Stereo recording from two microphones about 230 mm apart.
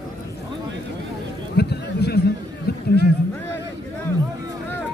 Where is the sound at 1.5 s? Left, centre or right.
Left.